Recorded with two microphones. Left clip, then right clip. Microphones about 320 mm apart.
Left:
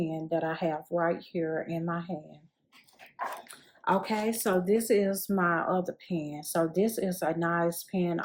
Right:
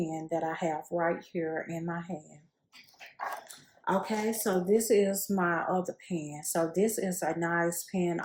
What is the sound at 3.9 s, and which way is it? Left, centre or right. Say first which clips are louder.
Speech: left 2 dB; left.